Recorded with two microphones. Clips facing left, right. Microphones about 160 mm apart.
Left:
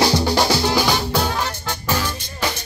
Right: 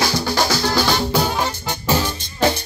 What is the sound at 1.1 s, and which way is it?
Music, 5° right (ahead or behind).